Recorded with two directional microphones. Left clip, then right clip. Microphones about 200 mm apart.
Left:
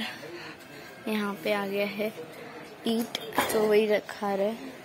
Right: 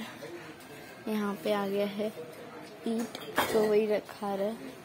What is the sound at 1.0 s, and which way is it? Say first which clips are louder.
A woman's voice: left 2 dB; 5° right (ahead or behind).